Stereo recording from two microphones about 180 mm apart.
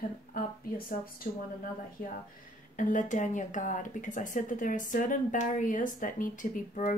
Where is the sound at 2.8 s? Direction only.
45° left (ahead or behind).